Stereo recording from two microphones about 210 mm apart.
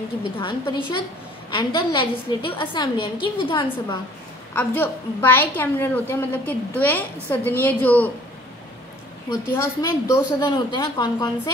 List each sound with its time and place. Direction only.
0.4 s a woman's voice: 20° left (ahead or behind)
4.6 s a woman's voice: 10° left (ahead or behind)
9.3 s a woman's voice: 15° left (ahead or behind)